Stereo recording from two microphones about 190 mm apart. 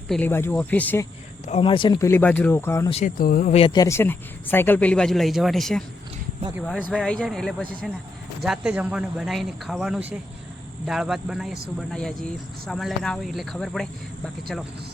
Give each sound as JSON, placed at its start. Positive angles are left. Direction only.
{"t": 0.1, "sound": "speech", "side_deg": 10}
{"t": 1.5, "sound": "speech", "side_deg": 30}
{"t": 2.9, "sound": "speech", "side_deg": 45}
{"t": 3.5, "sound": "speech", "side_deg": 30}
{"t": 3.8, "sound": "speech", "side_deg": 15}